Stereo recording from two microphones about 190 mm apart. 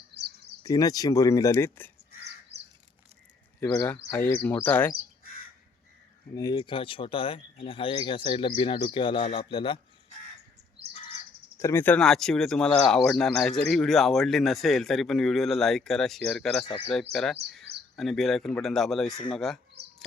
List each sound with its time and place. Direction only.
0.1 s bird: 60° right (ahead or behind)
0.6 s speech: 20° left (ahead or behind)
3.6 s speech: 10° left (ahead or behind)
6.3 s speech: 20° left (ahead or behind)
11.6 s speech: 10° left (ahead or behind)
16.6 s speech: 30° left (ahead or behind)
16.9 s speech: centre (ahead or behind)